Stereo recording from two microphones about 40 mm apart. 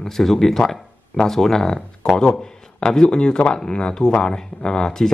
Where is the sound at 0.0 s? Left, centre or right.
Centre.